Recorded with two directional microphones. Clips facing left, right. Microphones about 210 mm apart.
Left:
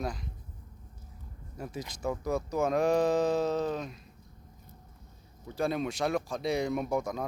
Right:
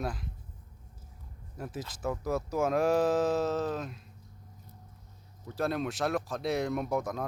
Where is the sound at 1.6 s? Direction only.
5° right (ahead or behind).